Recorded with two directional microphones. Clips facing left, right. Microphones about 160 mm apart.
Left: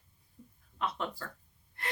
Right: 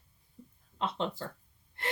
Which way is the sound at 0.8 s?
25° right (ahead or behind).